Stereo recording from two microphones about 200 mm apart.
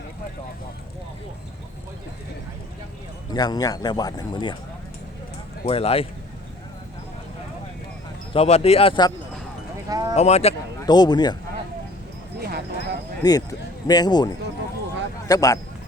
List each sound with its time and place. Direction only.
3.3 s speech: 20° left (ahead or behind)
5.6 s speech: 30° left (ahead or behind)
8.3 s speech: 30° left (ahead or behind)
9.9 s speech: 20° right (ahead or behind)
10.2 s speech: 35° left (ahead or behind)
10.8 s speech: 20° left (ahead or behind)
12.4 s clip-clop: 55° right (ahead or behind)
13.2 s speech: 20° left (ahead or behind)
15.3 s speech: 20° left (ahead or behind)